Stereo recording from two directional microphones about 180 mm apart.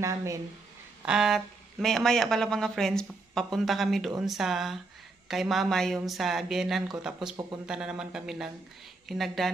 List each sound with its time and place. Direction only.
0.0 s speech: 15° right (ahead or behind)
1.0 s speech: 5° right (ahead or behind)